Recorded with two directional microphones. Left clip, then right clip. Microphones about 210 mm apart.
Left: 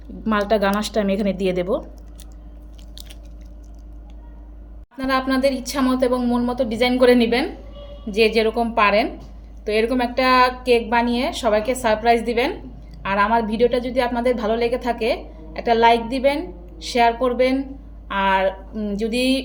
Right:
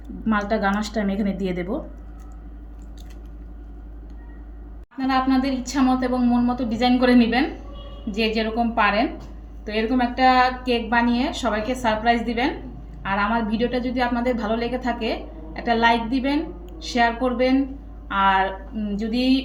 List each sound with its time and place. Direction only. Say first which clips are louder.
0.3 s a woman's voice: left 3 dB; 35° left (ahead or behind)
4.9 s a woman's voice: left 1 dB; 35° left (ahead or behind)